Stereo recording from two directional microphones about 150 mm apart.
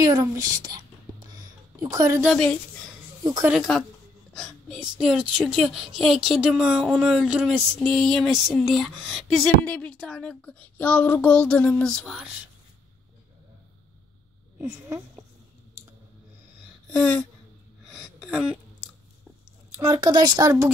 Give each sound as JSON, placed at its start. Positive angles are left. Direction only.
{"t": 0.0, "sound": "speech", "side_deg": -25}
{"t": 2.2, "sound": "speech", "side_deg": 5}
{"t": 7.8, "sound": "speech", "side_deg": 0}
{"t": 16.9, "sound": "speech", "side_deg": 5}
{"t": 17.8, "sound": "a sound", "side_deg": -5}
{"t": 19.8, "sound": "speech", "side_deg": -25}